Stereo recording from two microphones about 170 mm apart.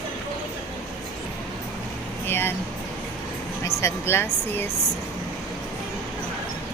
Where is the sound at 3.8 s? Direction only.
15° left (ahead or behind).